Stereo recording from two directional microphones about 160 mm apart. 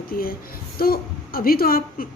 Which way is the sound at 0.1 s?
65° left (ahead or behind).